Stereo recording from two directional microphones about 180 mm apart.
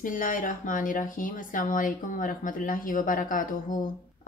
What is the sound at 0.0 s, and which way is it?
Speech, 50° left (ahead or behind).